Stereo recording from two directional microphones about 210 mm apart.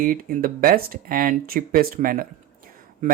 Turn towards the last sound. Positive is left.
turn(degrees=-40)  # may be behind; listen again after turning